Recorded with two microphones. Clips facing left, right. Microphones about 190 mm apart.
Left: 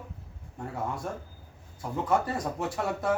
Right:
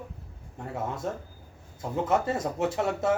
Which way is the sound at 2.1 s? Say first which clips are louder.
Even; 20° right (ahead or behind).